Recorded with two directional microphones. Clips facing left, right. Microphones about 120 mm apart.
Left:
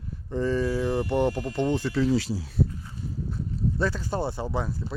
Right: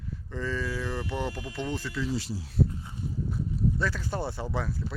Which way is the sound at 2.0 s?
80° left.